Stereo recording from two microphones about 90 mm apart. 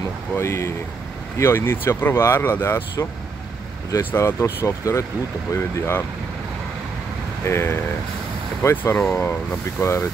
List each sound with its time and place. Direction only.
0.4 s speech: 30° left (ahead or behind)
7.4 s speech: 30° left (ahead or behind)